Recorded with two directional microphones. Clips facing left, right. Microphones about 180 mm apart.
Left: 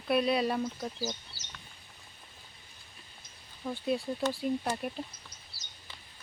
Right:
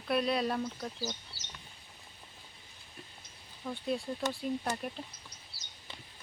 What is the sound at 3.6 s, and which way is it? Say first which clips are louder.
Speech: left 3 dB; 5° left (ahead or behind).